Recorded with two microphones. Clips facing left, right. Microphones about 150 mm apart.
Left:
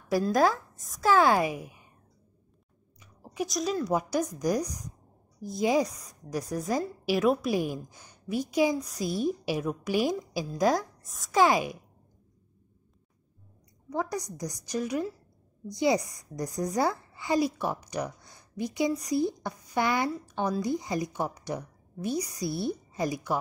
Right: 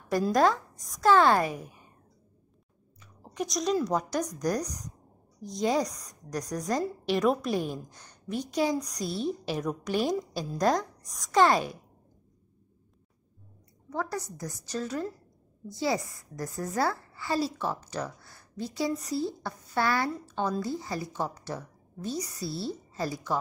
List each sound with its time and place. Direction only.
0.2 s a woman's voice: 5° left (ahead or behind)
3.2 s a woman's voice: 5° left (ahead or behind)
13.8 s a woman's voice: 15° left (ahead or behind)